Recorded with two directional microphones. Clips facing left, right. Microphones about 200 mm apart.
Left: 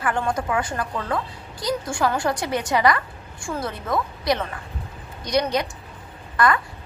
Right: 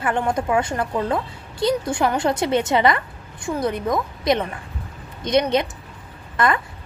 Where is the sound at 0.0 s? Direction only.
20° right (ahead or behind).